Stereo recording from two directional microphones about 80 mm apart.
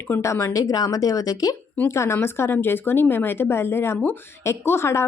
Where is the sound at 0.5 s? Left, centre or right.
Left.